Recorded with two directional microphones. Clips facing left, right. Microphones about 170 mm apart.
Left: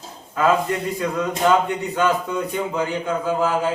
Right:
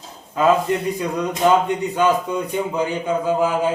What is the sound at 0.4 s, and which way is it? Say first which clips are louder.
Speech: right 2 dB; 20° right (ahead or behind).